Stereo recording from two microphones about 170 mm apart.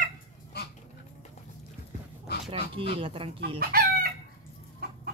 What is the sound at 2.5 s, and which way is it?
Speech, 35° right (ahead or behind).